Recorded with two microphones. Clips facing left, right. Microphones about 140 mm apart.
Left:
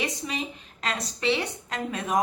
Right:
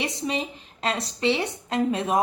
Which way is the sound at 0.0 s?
30° right (ahead or behind).